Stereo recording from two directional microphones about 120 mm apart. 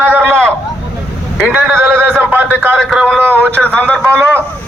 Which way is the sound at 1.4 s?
15° right (ahead or behind).